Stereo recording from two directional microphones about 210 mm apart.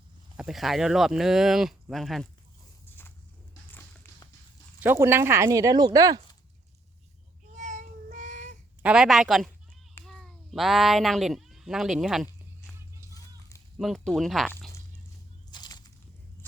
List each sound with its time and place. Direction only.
0.3 s speech: centre (ahead or behind)
3.7 s a sound: 10° left (ahead or behind)
4.8 s speech: 10° right (ahead or behind)
7.5 s child singing: 35° right (ahead or behind)
8.8 s speech: 5° right (ahead or behind)
9.9 s cat: 5° left (ahead or behind)
13.7 s speech: centre (ahead or behind)
15.4 s a sound: 20° left (ahead or behind)